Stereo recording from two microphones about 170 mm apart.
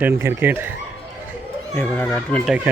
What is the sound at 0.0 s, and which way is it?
Speech, 15° right (ahead or behind).